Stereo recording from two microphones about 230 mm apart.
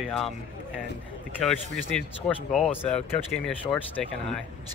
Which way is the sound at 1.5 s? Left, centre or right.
Centre.